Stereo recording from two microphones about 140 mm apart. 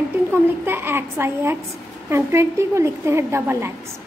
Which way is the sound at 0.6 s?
15° right (ahead or behind).